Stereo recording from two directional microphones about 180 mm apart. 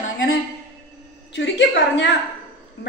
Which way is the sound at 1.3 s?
75° left (ahead or behind).